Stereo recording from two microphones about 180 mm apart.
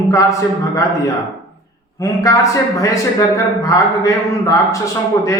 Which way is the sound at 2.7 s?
20° left (ahead or behind).